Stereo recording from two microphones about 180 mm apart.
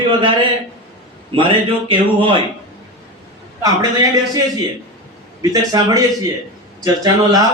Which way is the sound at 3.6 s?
20° right (ahead or behind).